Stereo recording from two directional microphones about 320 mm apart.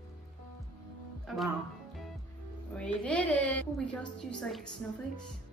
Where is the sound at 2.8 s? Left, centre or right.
Centre.